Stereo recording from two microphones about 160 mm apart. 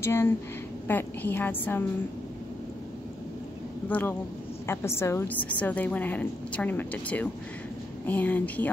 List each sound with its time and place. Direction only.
0.0 s a woman's voice: 15° left (ahead or behind)
4.6 s a woman's voice: 15° left (ahead or behind)